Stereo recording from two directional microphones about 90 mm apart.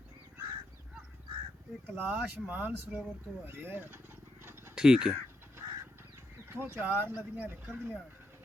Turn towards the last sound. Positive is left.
turn(degrees=-25)  # may be behind; listen again after turning